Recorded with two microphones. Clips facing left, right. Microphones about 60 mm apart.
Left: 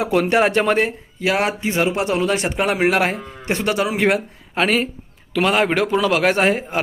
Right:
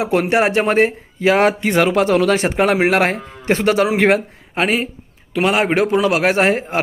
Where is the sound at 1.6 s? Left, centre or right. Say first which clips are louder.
Right 5 dB; right.